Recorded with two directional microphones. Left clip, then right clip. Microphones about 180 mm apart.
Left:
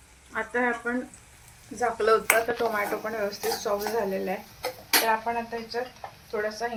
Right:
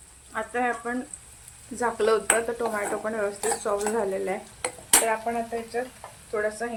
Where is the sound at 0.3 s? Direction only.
10° right (ahead or behind).